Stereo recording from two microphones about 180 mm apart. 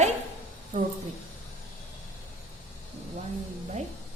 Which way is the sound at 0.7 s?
45° right (ahead or behind).